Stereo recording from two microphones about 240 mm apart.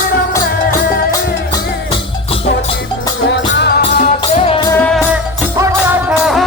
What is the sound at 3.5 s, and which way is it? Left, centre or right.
Music, left.